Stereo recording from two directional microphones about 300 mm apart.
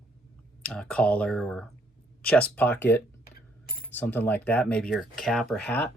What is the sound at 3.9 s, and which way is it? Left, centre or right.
Speech, centre.